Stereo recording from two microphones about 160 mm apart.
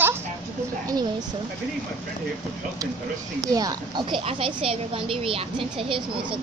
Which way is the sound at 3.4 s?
25° right (ahead or behind).